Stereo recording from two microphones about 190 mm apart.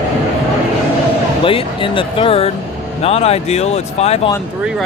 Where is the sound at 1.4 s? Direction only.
30° left (ahead or behind).